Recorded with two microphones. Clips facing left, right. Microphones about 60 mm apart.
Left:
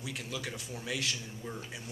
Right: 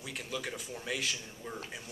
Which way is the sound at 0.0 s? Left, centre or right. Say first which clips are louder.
Even; centre.